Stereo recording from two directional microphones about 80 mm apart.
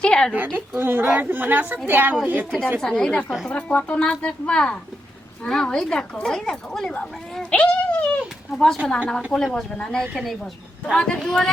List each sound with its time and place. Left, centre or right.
0.0 s a sound: centre
0.3 s a woman's voice: right
2.8 s speech: centre
3.2 s a woman's voice: centre
3.5 s speech: centre
7.5 s cat: centre
8.5 s a woman's voice: centre